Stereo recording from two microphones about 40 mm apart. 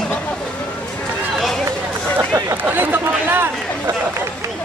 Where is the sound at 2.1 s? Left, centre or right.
Right.